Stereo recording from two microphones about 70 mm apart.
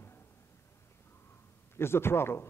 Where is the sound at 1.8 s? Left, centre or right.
Left.